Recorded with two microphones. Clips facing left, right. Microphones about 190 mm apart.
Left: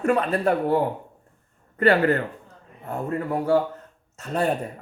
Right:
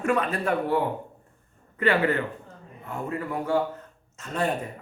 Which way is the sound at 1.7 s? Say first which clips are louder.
Left 4 dB; 40° left (ahead or behind).